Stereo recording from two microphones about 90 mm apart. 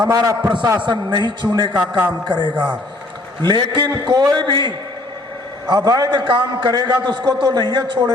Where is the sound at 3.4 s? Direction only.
60° right (ahead or behind).